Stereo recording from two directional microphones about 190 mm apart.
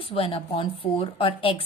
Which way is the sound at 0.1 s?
30° left (ahead or behind).